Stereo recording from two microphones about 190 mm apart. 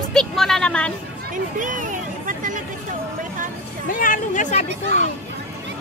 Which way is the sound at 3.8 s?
45° left (ahead or behind).